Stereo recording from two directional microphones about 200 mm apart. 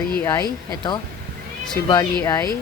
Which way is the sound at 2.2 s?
15° left (ahead or behind).